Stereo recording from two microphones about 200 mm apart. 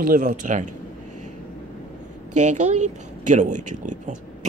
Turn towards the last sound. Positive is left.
turn(degrees=-40)  # may be behind; listen again after turning